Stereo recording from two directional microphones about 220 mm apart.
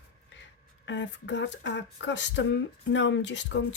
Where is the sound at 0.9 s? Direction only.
55° left (ahead or behind).